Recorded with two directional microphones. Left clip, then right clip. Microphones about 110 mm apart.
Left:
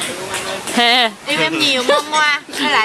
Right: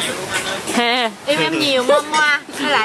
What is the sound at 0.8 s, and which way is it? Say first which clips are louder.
Speech: left 5 dB; 10° left (ahead or behind).